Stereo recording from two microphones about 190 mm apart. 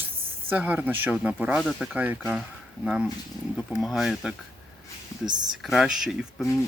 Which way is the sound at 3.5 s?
Centre (ahead or behind).